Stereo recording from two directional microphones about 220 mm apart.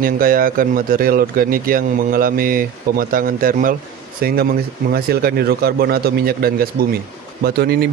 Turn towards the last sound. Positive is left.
turn(degrees=-45)  # may be behind; listen again after turning